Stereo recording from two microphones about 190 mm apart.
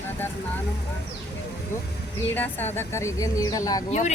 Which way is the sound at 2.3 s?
10° left (ahead or behind).